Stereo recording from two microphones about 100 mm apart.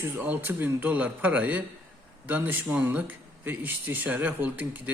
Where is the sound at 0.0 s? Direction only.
20° right (ahead or behind).